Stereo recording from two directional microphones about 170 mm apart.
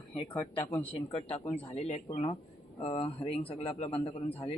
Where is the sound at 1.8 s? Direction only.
40° left (ahead or behind).